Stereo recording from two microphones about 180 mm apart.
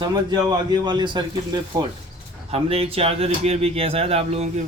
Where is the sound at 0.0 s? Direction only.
25° right (ahead or behind).